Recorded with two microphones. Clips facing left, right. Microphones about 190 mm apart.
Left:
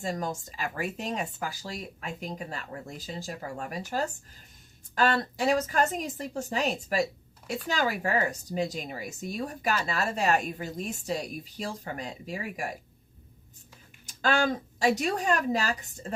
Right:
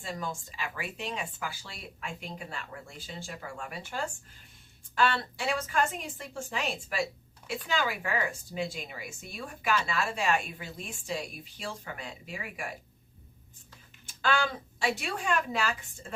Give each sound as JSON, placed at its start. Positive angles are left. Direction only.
{"t": 0.0, "sound": "a woman's voice", "side_deg": 40}
{"t": 14.1, "sound": "a woman's voice", "side_deg": 40}